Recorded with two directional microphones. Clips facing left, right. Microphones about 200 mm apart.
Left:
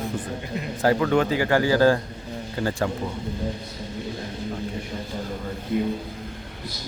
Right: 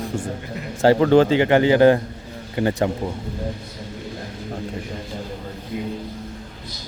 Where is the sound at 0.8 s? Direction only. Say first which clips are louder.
Right 6 dB; 30° right (ahead or behind).